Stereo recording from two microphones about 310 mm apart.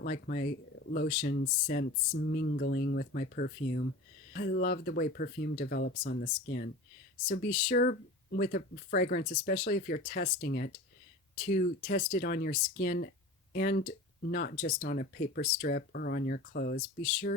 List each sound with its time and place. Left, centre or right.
0.0 s speech: left